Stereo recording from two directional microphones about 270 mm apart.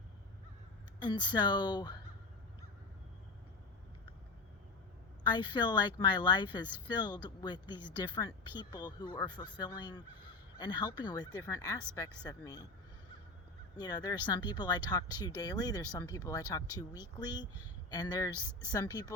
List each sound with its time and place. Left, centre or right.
0.9 s speech: centre
5.2 s speech: centre
13.7 s speech: centre